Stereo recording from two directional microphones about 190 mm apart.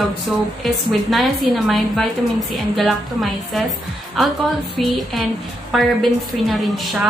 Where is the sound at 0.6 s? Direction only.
Centre (ahead or behind).